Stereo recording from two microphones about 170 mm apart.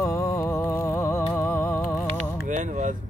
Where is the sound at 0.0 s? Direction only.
15° left (ahead or behind).